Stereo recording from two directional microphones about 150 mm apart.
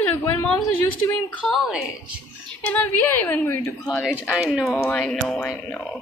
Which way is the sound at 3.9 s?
Centre (ahead or behind).